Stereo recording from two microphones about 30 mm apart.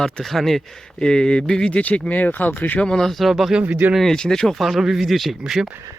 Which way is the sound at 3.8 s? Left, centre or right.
Right.